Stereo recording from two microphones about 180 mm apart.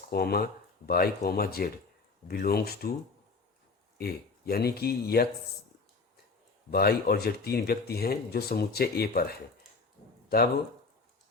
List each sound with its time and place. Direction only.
0.1 s speech: 60° left (ahead or behind)
3.9 s speech: 60° left (ahead or behind)
6.7 s speech: 60° left (ahead or behind)